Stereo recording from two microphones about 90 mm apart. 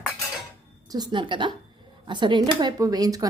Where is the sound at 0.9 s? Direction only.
60° right (ahead or behind).